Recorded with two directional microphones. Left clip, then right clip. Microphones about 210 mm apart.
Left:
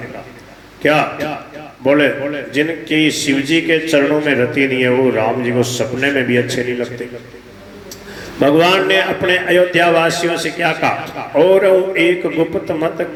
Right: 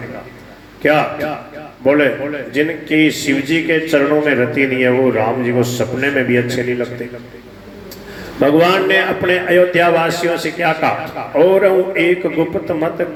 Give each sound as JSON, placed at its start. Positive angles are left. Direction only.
{"t": 0.8, "sound": "a man's voice", "side_deg": 40}
{"t": 8.4, "sound": "a man's voice", "side_deg": 40}